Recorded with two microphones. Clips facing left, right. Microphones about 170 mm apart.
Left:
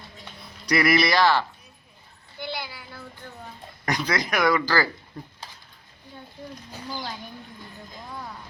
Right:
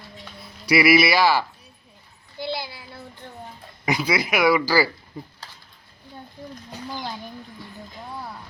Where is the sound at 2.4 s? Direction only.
30° right (ahead or behind).